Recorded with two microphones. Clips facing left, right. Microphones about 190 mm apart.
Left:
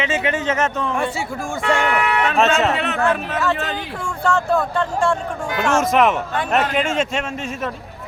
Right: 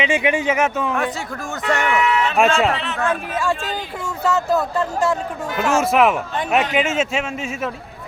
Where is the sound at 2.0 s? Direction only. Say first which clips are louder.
Right 1 dB; 60° left (ahead or behind).